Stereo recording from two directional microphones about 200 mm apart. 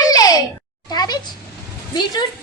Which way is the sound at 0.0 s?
20° left (ahead or behind).